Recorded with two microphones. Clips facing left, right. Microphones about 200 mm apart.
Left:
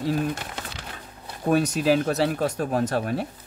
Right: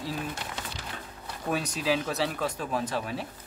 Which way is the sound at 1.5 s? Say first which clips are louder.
Left 8 dB; 50° left (ahead or behind).